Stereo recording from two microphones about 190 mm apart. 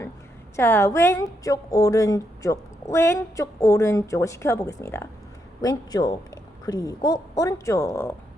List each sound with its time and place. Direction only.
0.5 s a woman's voice: 10° left (ahead or behind)